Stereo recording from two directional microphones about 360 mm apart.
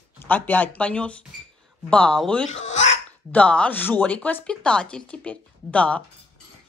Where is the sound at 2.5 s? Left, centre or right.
Centre.